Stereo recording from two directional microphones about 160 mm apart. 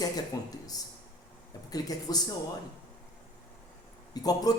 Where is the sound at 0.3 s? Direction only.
25° left (ahead or behind).